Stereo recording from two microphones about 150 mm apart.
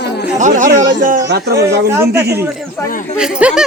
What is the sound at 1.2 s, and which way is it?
Speech, 90° right.